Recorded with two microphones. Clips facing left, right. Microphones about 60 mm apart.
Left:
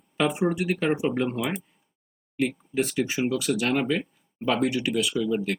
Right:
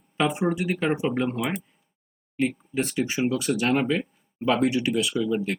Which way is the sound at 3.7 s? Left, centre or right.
Centre.